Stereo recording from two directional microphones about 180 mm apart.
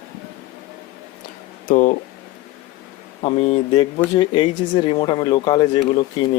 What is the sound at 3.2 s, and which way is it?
Speech, 30° left (ahead or behind).